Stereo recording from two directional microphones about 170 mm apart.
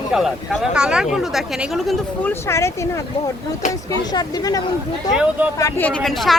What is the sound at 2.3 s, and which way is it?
Speech, 15° left (ahead or behind).